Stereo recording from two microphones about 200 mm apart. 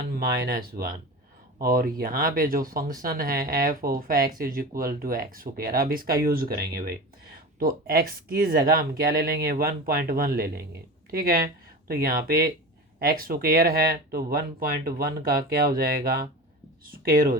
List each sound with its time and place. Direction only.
0.2 s speech: 50° right (ahead or behind)
7.6 s speech: 50° right (ahead or behind)